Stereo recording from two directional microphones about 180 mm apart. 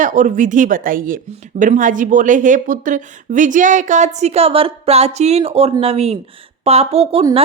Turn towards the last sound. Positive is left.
turn(degrees=-35)  # may be behind; listen again after turning